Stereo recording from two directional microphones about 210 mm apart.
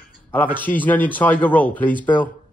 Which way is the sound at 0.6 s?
10° left (ahead or behind).